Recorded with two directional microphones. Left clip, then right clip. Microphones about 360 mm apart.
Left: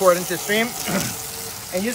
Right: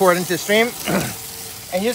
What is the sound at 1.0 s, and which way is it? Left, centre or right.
Frying, centre.